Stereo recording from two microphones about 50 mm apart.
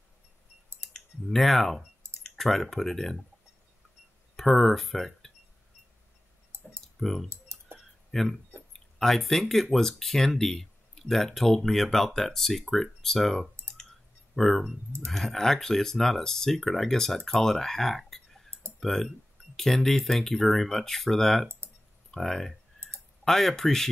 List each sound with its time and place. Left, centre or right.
1.3 s speech: centre
4.4 s speech: centre
7.0 s speech: centre
7.2 s typing: right
8.1 s speech: centre